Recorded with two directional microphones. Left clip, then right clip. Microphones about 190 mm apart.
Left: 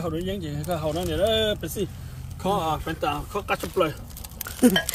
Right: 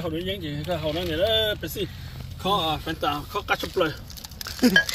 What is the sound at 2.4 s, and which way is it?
Speech, 15° right (ahead or behind).